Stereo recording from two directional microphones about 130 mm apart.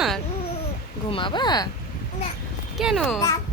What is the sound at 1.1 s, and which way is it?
Speech, 40° left (ahead or behind).